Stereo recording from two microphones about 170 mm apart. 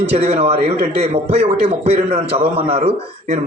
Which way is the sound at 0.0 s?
35° right (ahead or behind).